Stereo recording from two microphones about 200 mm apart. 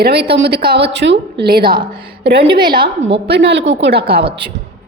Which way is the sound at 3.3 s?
60° right (ahead or behind).